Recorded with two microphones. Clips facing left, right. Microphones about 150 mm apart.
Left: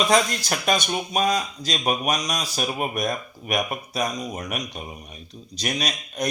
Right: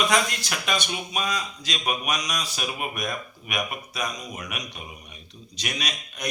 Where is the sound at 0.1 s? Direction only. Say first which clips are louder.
Left 4 dB; 40° left (ahead or behind).